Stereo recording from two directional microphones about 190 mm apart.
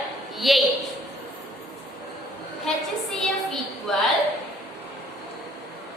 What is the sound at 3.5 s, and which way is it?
Speech, centre (ahead or behind).